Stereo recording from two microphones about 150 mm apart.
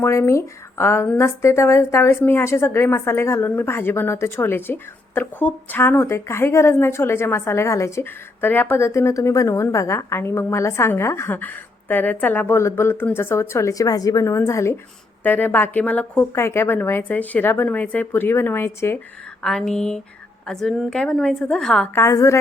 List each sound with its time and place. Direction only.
0.0 s a woman's voice: 20° left (ahead or behind)
19.4 s a woman's voice: centre (ahead or behind)
21.9 s a woman's voice: 20° left (ahead or behind)